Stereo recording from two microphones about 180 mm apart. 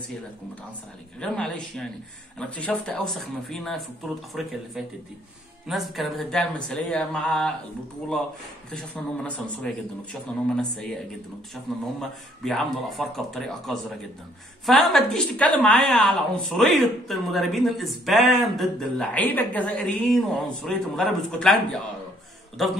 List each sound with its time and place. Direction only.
1.2 s a woman's voice: 5° left (ahead or behind)
8.7 s a man's voice: 5° left (ahead or behind)
12.4 s a woman's voice: centre (ahead or behind)